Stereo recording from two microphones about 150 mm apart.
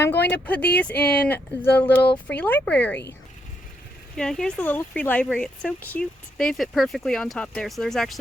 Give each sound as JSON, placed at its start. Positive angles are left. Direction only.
{"t": 0.0, "sound": "speech", "side_deg": 10}
{"t": 4.1, "sound": "speech", "side_deg": 5}